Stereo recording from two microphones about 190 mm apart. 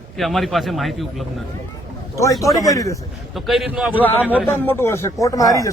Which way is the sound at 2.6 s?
15° left (ahead or behind).